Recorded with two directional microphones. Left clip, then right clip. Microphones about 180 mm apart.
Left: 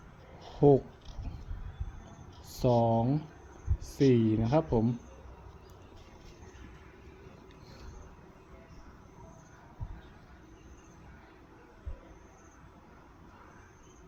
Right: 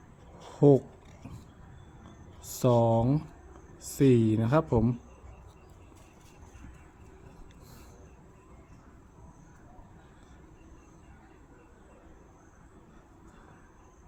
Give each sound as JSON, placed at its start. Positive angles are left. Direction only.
{"t": 0.6, "sound": "speech", "side_deg": -35}
{"t": 2.6, "sound": "speech", "side_deg": -35}